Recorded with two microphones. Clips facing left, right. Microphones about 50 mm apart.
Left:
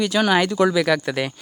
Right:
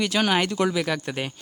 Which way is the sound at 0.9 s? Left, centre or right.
Left.